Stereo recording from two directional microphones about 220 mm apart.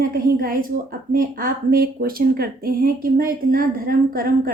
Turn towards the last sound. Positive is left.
turn(degrees=-40)  # may be behind; listen again after turning